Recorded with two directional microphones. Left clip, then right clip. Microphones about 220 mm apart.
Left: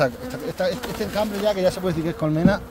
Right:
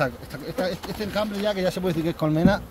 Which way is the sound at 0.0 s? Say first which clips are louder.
Left 4 dB; 25° left (ahead or behind).